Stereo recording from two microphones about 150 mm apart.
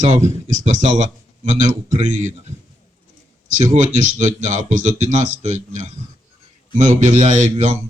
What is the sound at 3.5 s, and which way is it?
Speech, 55° right (ahead or behind).